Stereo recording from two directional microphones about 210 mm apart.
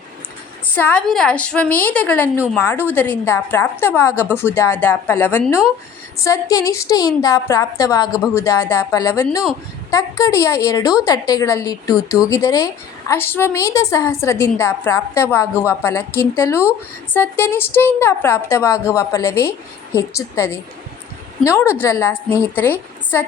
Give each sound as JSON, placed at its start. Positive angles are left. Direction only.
{"t": 0.8, "sound": "a woman's voice", "side_deg": 5}